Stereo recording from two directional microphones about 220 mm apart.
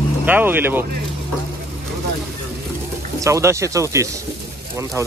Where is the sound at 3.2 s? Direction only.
15° right (ahead or behind).